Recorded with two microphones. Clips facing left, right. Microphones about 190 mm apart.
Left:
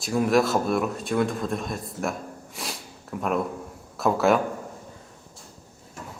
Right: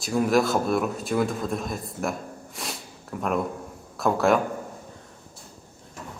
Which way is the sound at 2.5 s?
Centre (ahead or behind).